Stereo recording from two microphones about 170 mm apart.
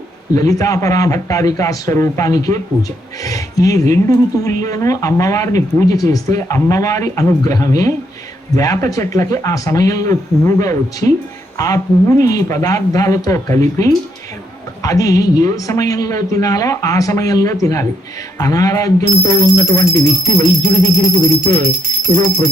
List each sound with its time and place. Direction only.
0.3 s speech: 20° left (ahead or behind)
21.4 s speech: 20° left (ahead or behind)